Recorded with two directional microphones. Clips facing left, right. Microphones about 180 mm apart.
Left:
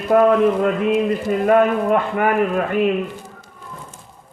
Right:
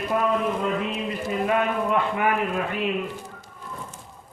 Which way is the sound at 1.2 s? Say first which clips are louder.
Left 7 dB; 50° left (ahead or behind).